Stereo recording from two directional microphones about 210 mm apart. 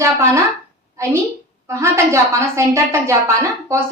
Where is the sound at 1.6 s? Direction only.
15° right (ahead or behind).